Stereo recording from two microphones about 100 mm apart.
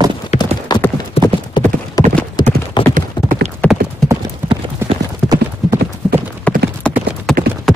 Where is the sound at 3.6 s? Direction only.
15° left (ahead or behind).